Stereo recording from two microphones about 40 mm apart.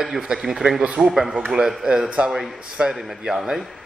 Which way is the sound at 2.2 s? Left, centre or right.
Right.